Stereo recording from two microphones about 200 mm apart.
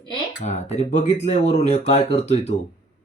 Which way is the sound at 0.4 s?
35° left (ahead or behind).